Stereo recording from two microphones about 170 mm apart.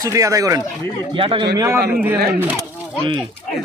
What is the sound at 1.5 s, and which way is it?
Speech, 15° right (ahead or behind).